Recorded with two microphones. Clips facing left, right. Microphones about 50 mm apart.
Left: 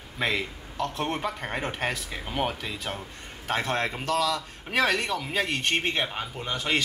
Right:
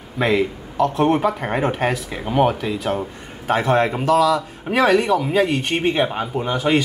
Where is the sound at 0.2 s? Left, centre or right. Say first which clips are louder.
Right 10 dB; centre.